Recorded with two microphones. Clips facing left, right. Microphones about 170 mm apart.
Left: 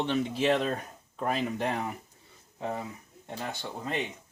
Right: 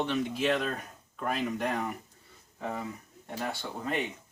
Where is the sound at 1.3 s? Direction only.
30° left (ahead or behind).